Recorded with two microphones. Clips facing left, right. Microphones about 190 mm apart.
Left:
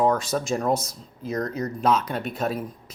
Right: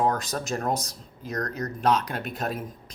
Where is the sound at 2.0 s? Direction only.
Centre (ahead or behind).